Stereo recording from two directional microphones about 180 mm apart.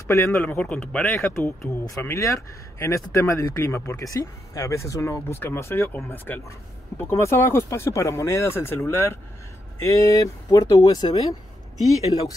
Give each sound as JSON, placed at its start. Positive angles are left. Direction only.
{"t": 0.1, "sound": "speech", "side_deg": 15}